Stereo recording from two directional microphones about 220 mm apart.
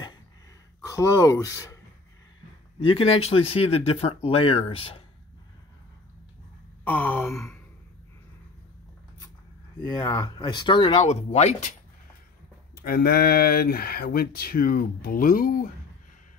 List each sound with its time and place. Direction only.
0.8 s speech: 15° left (ahead or behind)
2.8 s speech: 25° left (ahead or behind)
6.8 s a sound: 10° left (ahead or behind)
9.8 s speech: 20° left (ahead or behind)
12.8 s speech: 45° left (ahead or behind)